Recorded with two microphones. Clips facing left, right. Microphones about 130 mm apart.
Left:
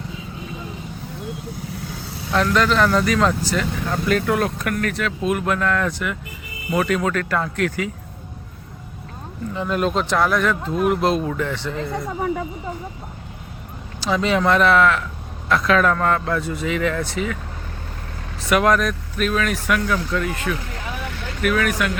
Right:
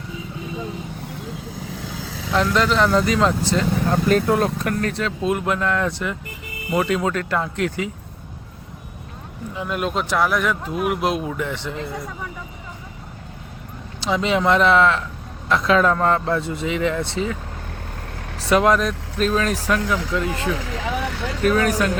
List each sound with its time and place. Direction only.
2.3 s speech: 20° right (ahead or behind)
9.6 s speech: 5° right (ahead or behind)
14.0 s speech: 20° right (ahead or behind)
18.4 s speech: 25° right (ahead or behind)
20.7 s vehicle: 85° right
21.4 s speech: 30° right (ahead or behind)